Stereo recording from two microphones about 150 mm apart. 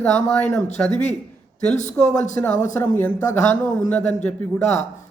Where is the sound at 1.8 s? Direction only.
55° left (ahead or behind).